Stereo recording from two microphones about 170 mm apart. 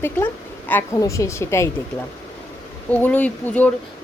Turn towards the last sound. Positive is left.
turn(degrees=10)  # may be behind; listen again after turning